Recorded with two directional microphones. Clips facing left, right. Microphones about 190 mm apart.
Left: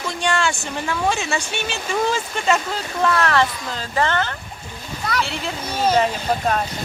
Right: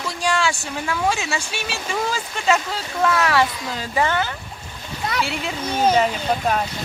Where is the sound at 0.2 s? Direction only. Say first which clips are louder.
Even; centre (ahead or behind).